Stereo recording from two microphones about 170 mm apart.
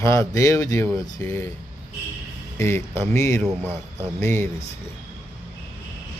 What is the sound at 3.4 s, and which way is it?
Speech, 5° left (ahead or behind).